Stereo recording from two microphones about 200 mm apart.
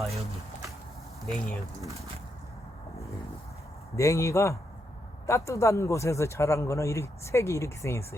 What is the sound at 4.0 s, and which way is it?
Speech, 15° left (ahead or behind).